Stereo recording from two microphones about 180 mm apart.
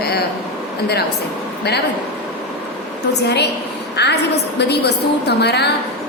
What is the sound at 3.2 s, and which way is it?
A woman's voice, 70° left (ahead or behind).